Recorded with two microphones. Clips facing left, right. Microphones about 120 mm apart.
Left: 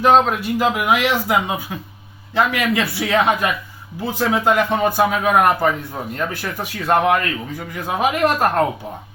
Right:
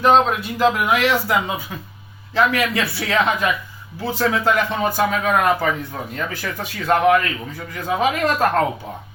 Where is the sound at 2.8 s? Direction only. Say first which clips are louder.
Left 2 dB; 55° left (ahead or behind).